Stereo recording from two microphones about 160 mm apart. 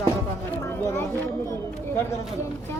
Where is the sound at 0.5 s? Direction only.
15° left (ahead or behind).